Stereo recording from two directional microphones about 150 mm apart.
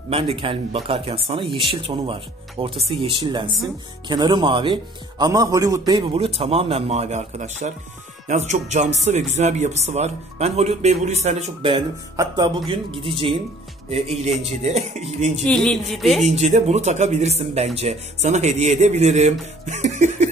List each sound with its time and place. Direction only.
0.1 s a man's voice: 40° right (ahead or behind); by 6.1 s 25° right (ahead or behind)
6.1 s speech: 45° right (ahead or behind)
12.2 s a man's voice: 30° right (ahead or behind)
13.8 s speech: 45° right (ahead or behind)
15.4 s speech: 5° left (ahead or behind)
16.3 s speech: 50° right (ahead or behind)